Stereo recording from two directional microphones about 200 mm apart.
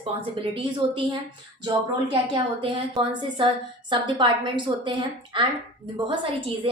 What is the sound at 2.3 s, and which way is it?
A woman's voice, 25° right (ahead or behind).